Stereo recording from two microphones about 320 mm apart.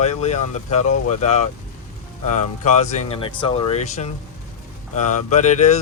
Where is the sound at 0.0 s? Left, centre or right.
Left.